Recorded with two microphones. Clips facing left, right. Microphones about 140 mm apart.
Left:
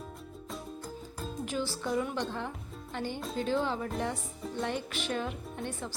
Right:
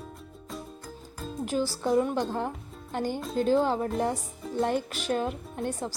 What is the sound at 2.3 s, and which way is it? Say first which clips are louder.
A woman's voice: right 6 dB; 45° right (ahead or behind).